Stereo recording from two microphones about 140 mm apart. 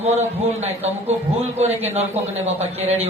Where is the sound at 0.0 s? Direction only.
50° right (ahead or behind).